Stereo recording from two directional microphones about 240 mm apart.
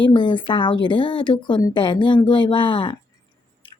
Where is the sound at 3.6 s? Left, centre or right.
Left.